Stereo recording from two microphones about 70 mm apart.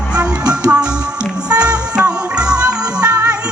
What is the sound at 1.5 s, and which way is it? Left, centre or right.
Music, centre.